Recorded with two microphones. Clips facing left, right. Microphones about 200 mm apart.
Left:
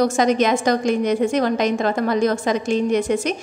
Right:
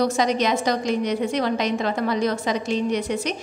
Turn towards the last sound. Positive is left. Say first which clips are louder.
# left 5 dB
turn(degrees=45)  # may be behind; listen again after turning